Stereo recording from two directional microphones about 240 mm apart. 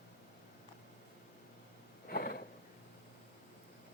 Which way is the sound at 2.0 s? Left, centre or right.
Left.